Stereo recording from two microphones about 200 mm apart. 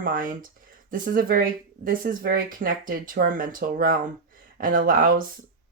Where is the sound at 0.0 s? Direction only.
45° right (ahead or behind).